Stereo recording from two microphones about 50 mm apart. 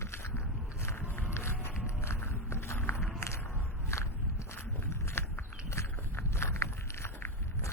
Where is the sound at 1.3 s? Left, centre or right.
Left.